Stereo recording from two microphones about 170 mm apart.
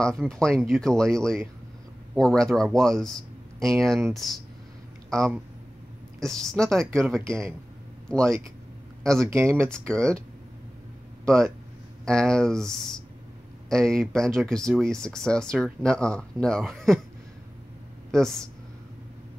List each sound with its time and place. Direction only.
0.0 s speech: 5° left (ahead or behind)
7.2 s speech: 15° right (ahead or behind)
9.0 s speech: 5° left (ahead or behind)
9.3 s speech: 15° right (ahead or behind)
9.6 s speech: 5° left (ahead or behind)
11.2 s speech: 5° left (ahead or behind)
18.1 s speech: 5° left (ahead or behind)